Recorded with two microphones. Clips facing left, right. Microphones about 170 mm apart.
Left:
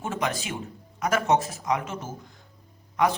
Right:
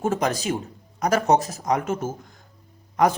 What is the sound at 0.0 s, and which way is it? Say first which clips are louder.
Speech: right 6 dB; 40° right (ahead or behind).